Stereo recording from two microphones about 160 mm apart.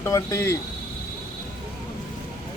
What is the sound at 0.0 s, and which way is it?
Speech, 20° left (ahead or behind).